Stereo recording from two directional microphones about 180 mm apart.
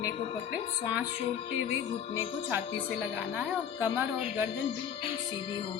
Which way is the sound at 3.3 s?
5° right (ahead or behind).